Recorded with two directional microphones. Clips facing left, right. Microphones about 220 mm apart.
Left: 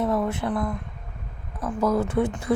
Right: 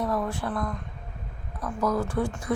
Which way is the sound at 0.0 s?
25° left (ahead or behind).